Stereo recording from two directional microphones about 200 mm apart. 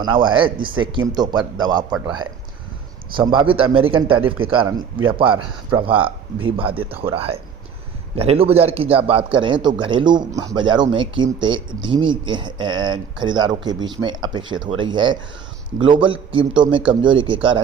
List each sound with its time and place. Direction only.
0.0 s speech: 25° right (ahead or behind)
3.1 s speech: 25° right (ahead or behind)